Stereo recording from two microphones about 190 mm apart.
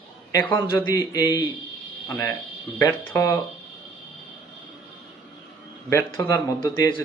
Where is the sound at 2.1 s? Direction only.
15° left (ahead or behind).